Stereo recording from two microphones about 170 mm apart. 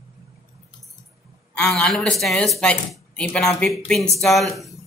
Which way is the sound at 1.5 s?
5° left (ahead or behind).